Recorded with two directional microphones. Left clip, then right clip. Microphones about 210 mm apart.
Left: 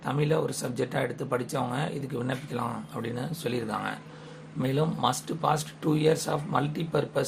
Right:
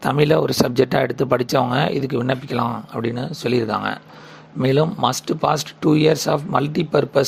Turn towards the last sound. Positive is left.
turn(degrees=-35)  # may be behind; listen again after turning